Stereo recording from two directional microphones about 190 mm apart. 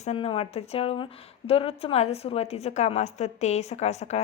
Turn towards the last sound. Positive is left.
turn(degrees=35)  # may be behind; listen again after turning